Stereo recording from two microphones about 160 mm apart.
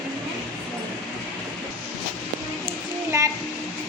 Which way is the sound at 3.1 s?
20° right (ahead or behind).